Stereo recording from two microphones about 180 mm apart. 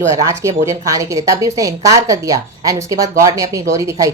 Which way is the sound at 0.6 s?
15° right (ahead or behind).